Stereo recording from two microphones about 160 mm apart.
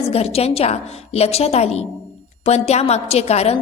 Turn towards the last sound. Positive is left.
turn(degrees=40)  # may be behind; listen again after turning